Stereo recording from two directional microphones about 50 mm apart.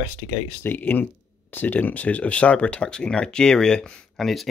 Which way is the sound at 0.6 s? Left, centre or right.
Left.